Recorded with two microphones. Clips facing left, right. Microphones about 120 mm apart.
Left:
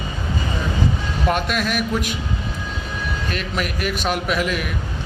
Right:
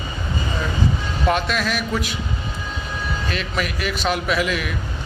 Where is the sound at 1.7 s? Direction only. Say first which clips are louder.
Left 2 dB; 50° left (ahead or behind).